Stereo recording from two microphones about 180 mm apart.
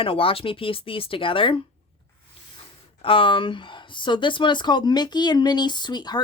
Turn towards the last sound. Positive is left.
turn(degrees=25)  # may be behind; listen again after turning